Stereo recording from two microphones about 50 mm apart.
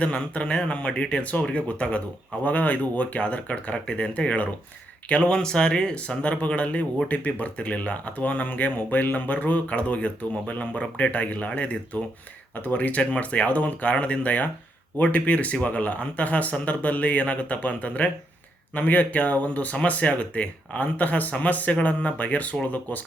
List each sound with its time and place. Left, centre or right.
0.0 s speech: left